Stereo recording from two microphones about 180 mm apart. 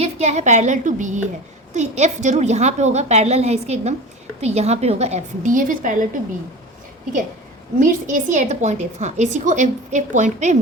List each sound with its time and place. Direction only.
0.0 s a woman's voice: 40° right (ahead or behind)
7.8 s a woman's voice: 45° right (ahead or behind)